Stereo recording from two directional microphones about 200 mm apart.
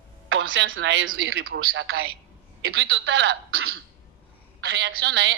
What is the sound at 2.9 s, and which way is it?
Speech, 60° right (ahead or behind).